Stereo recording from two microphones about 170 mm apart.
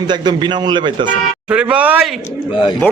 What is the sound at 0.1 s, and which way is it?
A man's voice, 25° right (ahead or behind).